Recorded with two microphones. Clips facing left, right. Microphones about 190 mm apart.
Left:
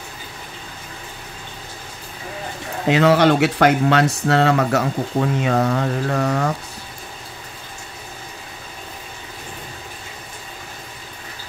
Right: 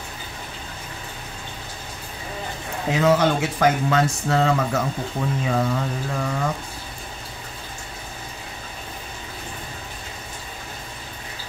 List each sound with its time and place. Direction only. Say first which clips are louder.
2.9 s speech: left 4 dB; 70° left (ahead or behind)